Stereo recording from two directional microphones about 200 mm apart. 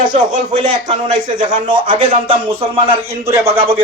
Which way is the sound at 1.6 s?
25° right (ahead or behind).